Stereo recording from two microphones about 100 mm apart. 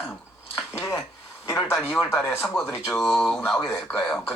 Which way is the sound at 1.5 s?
5° right (ahead or behind).